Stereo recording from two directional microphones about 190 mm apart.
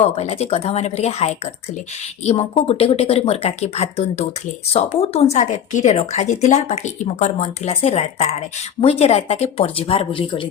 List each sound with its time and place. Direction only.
0.0 s speech: 35° left (ahead or behind)